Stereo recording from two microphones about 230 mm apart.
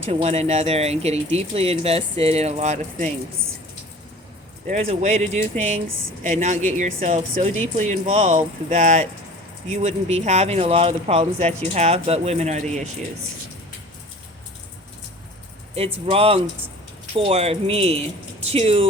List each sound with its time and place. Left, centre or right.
0.0 s speech: right
4.6 s speech: right
15.7 s speech: right